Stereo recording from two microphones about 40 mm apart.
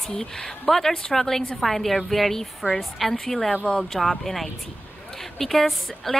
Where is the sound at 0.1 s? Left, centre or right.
Centre.